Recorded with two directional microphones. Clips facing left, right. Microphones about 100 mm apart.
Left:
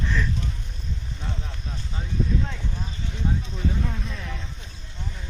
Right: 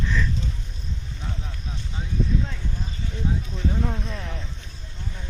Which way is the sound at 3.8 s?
30° right (ahead or behind).